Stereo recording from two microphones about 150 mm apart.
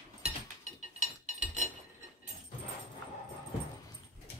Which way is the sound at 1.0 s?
50° right (ahead or behind).